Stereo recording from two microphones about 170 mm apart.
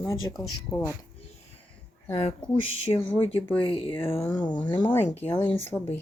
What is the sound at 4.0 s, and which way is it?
Speech, 15° left (ahead or behind).